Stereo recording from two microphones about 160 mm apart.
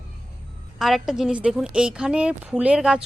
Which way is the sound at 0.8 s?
Centre (ahead or behind).